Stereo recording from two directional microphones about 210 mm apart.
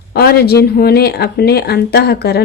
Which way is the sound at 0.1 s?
50° left (ahead or behind).